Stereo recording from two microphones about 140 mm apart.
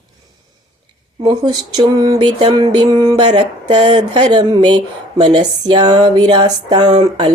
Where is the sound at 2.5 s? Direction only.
35° right (ahead or behind).